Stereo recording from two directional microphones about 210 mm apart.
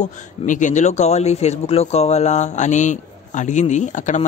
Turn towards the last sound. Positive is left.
turn(degrees=35)  # may be behind; listen again after turning